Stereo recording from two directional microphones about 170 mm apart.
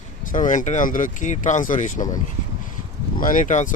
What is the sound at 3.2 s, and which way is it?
Speech, 50° left (ahead or behind).